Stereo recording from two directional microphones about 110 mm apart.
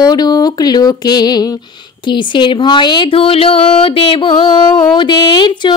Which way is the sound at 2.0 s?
45° left (ahead or behind).